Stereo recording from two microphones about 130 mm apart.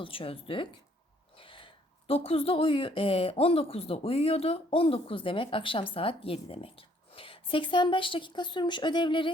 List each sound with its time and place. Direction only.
0.0 s a woman's voice: 45° left (ahead or behind)